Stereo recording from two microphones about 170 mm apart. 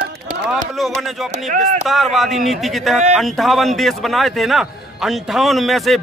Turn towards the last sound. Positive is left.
turn(degrees=0)  # may be behind; listen again after turning